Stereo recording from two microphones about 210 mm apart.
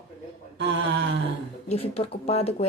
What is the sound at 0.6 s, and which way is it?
Speech, 55° right (ahead or behind).